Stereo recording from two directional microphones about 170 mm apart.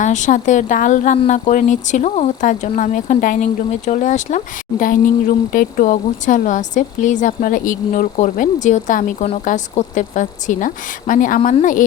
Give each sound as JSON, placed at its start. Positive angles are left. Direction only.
{"t": 0.0, "sound": "speech", "side_deg": 45}